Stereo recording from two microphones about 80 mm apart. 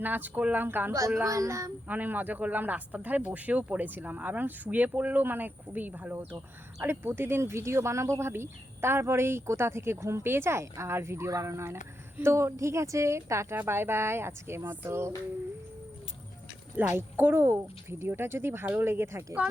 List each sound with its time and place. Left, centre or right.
0.0 s speech: right
1.2 s speech: right
1.9 s speech: right
16.7 s speech: right